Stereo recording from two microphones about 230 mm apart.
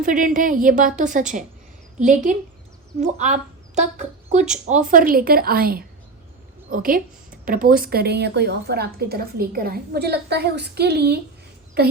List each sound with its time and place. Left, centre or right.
0.0 s a woman's voice: right